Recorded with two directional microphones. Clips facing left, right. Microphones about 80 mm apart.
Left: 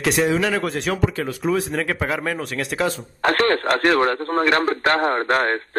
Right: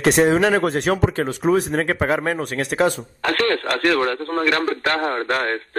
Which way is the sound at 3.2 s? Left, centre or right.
Left.